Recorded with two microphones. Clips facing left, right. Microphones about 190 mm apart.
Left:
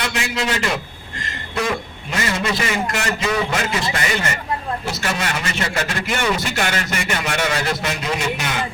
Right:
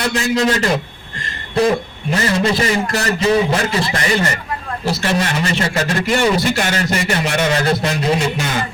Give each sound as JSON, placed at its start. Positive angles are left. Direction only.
{"t": 0.0, "sound": "a man's voice", "side_deg": -35}